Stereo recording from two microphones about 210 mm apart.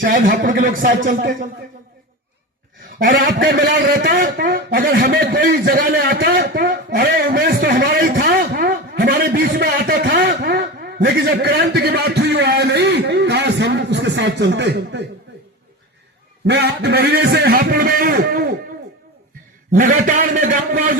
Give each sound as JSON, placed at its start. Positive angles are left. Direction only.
{"t": 0.0, "sound": "a man's voice", "side_deg": -40}
{"t": 3.0, "sound": "a man's voice", "side_deg": -40}
{"t": 16.5, "sound": "a man's voice", "side_deg": -50}
{"t": 19.7, "sound": "a man's voice", "side_deg": -40}